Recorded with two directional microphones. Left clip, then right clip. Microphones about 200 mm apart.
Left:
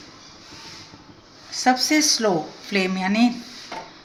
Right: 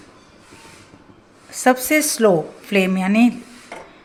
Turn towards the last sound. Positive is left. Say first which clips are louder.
# right 3 dB
turn(degrees=-35)  # may be behind; listen again after turning